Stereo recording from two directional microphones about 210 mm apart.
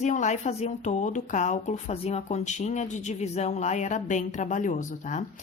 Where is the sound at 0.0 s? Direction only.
35° left (ahead or behind).